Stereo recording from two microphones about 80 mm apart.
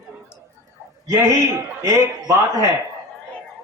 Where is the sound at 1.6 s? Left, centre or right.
Right.